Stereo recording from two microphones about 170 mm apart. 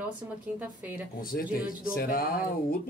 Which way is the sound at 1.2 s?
60° left (ahead or behind).